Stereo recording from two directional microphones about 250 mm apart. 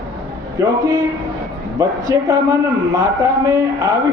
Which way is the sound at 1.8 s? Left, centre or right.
Centre.